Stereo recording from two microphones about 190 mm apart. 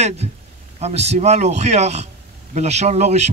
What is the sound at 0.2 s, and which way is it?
Speech, 35° right (ahead or behind).